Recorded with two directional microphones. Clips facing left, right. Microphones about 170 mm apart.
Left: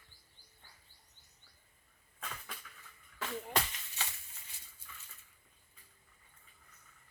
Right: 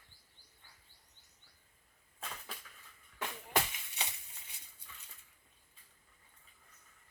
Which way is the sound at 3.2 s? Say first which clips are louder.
Even; 15° right (ahead or behind).